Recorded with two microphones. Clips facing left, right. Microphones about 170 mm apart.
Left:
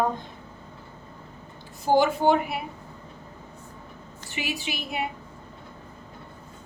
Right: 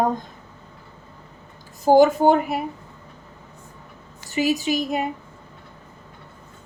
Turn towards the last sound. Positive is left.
turn(degrees=-40)  # may be behind; listen again after turning